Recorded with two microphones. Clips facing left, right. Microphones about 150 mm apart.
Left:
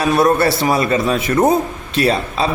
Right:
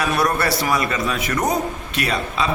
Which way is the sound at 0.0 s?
25° left (ahead or behind).